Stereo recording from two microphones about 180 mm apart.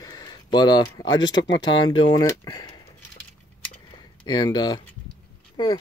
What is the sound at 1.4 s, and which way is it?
Speech, 80° left.